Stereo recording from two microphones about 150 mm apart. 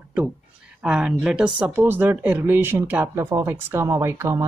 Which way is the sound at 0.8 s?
5° right (ahead or behind).